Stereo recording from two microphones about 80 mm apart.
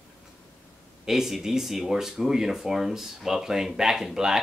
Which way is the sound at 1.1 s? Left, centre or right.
Centre.